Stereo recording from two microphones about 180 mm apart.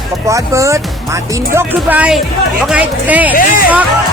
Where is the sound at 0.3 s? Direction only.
15° right (ahead or behind).